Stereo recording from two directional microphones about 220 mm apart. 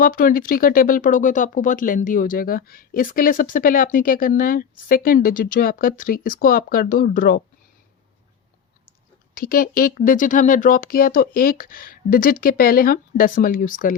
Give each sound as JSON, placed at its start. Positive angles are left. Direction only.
{"t": 0.0, "sound": "speech", "side_deg": 40}
{"t": 9.3, "sound": "speech", "side_deg": 40}